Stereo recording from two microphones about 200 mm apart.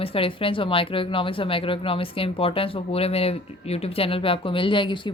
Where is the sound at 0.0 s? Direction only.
25° left (ahead or behind).